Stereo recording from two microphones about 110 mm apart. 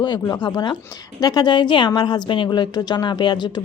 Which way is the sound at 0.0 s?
45° left (ahead or behind).